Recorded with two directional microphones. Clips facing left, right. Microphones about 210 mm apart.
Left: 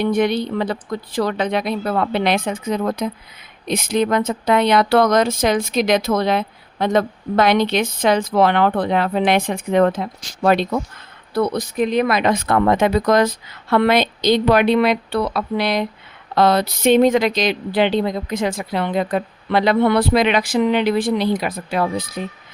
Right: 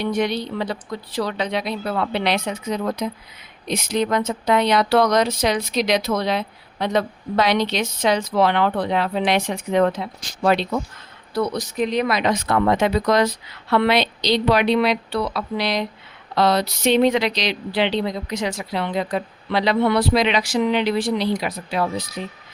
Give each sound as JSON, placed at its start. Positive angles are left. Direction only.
{"t": 0.0, "sound": "speech", "side_deg": 55}